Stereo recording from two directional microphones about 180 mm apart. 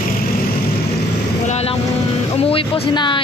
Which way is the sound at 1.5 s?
35° left (ahead or behind).